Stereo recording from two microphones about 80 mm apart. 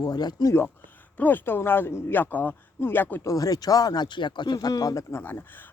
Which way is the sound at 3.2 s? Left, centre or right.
Left.